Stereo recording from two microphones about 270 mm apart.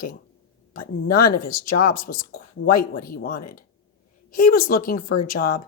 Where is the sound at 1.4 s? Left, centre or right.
Left.